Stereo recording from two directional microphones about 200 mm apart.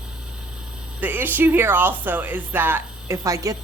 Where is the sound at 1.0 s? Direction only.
10° right (ahead or behind).